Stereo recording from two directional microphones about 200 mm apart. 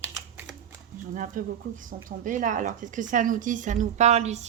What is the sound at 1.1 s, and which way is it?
Speech, 40° right (ahead or behind).